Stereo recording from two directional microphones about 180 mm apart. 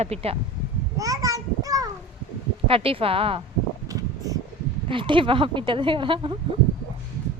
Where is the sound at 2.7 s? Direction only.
30° right (ahead or behind).